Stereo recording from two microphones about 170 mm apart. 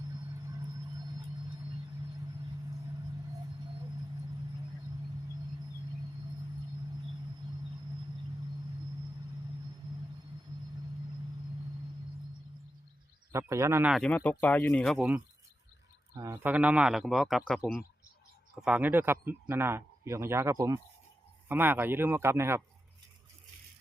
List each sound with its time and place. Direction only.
0.4 s music: 20° right (ahead or behind)
13.3 s speech: 15° right (ahead or behind)
13.9 s speech: 5° left (ahead or behind)
14.9 s speech: 5° right (ahead or behind)
16.1 s speech: 15° right (ahead or behind); by 17.6 s centre (ahead or behind)
18.6 s speech: 10° right (ahead or behind)